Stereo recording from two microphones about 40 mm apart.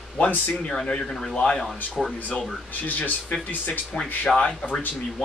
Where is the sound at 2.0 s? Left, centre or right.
Centre.